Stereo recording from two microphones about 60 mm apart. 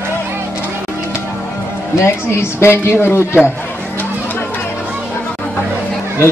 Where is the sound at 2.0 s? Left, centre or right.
Left.